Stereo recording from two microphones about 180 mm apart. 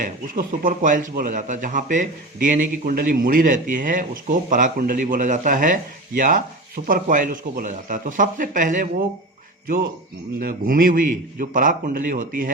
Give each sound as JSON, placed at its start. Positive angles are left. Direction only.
{"t": 0.0, "sound": "speech", "side_deg": -50}
{"t": 10.4, "sound": "speech", "side_deg": -50}